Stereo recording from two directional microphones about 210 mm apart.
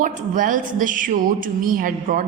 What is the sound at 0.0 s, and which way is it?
A woman's voice, 40° right (ahead or behind).